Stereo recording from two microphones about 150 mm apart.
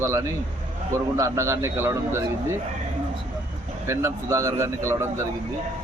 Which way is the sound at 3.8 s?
20° right (ahead or behind).